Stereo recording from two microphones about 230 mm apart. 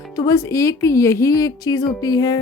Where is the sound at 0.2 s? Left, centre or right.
Centre.